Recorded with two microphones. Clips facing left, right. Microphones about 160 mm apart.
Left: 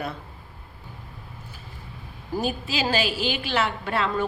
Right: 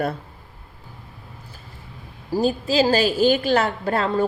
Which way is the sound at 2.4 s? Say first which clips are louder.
Right 8 dB; 35° right (ahead or behind).